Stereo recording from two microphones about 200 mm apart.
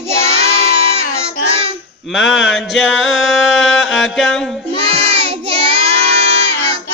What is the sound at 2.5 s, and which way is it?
Music, centre (ahead or behind).